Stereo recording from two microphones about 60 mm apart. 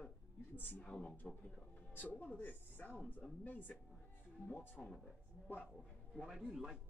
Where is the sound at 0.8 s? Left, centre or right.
Centre.